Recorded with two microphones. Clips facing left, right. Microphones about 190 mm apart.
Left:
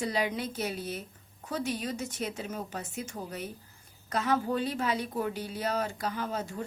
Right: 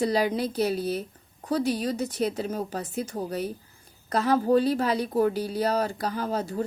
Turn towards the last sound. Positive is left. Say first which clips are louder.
# right 6 dB
turn(degrees=-35)  # may be behind; listen again after turning